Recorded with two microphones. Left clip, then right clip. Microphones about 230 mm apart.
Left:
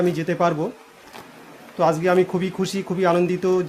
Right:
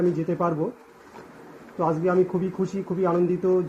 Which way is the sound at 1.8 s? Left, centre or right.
Left.